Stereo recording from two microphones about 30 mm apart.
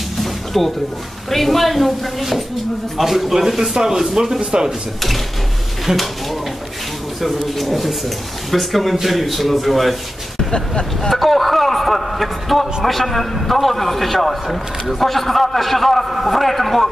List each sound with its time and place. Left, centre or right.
0.2 s a sound: centre
1.3 s a man's voice: centre
4.4 s speech: right
5.9 s speech: right
7.2 s a man's voice: centre
10.5 s speech: left
11.0 s a man's voice: centre